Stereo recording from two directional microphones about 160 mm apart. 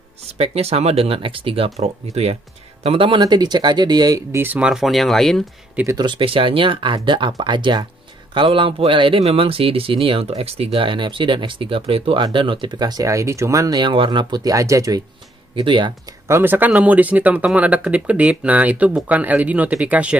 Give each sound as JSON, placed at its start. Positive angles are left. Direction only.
{"t": 0.4, "sound": "speech", "side_deg": -40}
{"t": 5.9, "sound": "speech", "side_deg": -30}
{"t": 15.5, "sound": "speech", "side_deg": -30}
{"t": 16.3, "sound": "speech", "side_deg": -15}